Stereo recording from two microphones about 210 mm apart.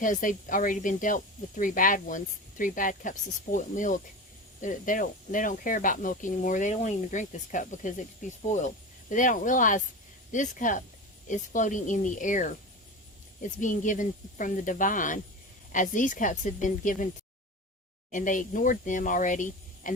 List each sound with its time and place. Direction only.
0.0 s speech: 40° left (ahead or behind)
18.1 s speech: 40° left (ahead or behind)